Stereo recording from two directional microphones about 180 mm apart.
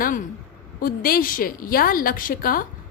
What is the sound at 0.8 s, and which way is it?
A woman's voice, 55° left (ahead or behind).